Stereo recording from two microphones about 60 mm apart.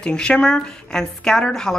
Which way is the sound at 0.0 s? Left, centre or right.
Centre.